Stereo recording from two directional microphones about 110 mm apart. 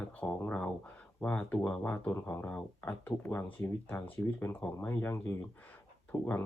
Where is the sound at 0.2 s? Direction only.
10° left (ahead or behind).